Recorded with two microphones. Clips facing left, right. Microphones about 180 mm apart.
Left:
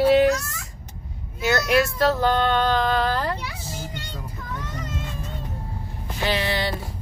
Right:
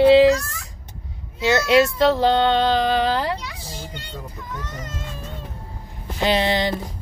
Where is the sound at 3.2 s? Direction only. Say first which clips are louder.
Right 2 dB; 15° right (ahead or behind).